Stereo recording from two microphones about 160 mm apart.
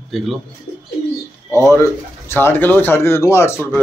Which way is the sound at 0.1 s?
Centre (ahead or behind).